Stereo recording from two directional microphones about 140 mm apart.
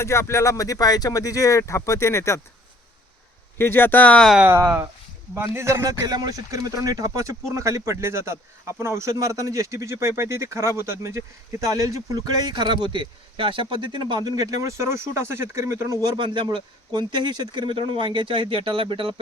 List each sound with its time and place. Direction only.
0.0 s speech: 20° left (ahead or behind)
3.6 s speech: 15° left (ahead or behind)
4.4 s speech: 20° right (ahead or behind); by 19.2 s 35° right (ahead or behind)